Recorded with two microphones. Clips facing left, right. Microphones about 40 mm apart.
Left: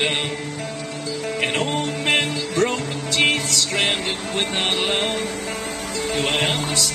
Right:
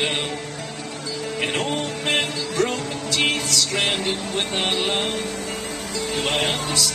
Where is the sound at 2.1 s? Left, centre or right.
Left; by 4.9 s centre.